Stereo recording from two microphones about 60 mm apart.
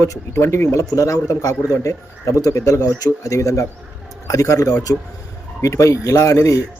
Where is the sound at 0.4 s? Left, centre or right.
Left.